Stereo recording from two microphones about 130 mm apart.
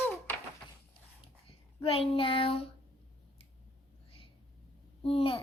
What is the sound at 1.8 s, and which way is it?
Speech, 45° left (ahead or behind).